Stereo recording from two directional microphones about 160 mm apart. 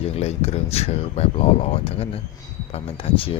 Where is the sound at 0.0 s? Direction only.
40° left (ahead or behind).